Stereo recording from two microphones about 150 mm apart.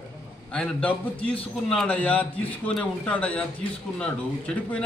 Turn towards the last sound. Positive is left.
turn(degrees=10)  # may be behind; listen again after turning